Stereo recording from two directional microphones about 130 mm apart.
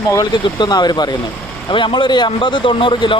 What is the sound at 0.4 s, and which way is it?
Speech, 35° left (ahead or behind).